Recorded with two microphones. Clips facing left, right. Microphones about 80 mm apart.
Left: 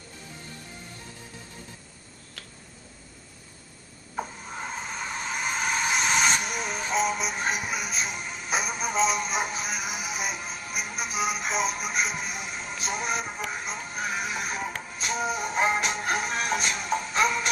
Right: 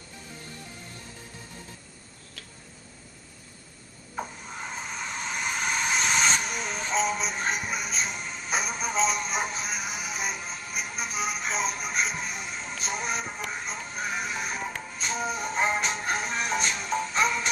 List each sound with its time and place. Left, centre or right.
4.1 s mechanisms: centre
13.5 s music: centre